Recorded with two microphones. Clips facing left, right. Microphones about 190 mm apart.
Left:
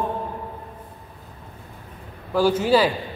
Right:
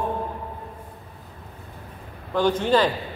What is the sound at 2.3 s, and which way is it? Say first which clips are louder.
Speech: left 2 dB; 5° left (ahead or behind).